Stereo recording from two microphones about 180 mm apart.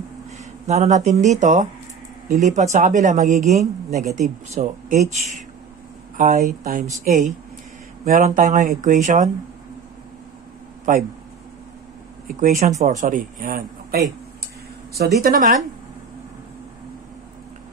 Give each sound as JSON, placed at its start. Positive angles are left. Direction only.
{"t": 0.7, "sound": "speech", "side_deg": -40}
{"t": 6.1, "sound": "speech", "side_deg": -40}
{"t": 12.3, "sound": "speech", "side_deg": -45}
{"t": 15.1, "sound": "speech", "side_deg": -55}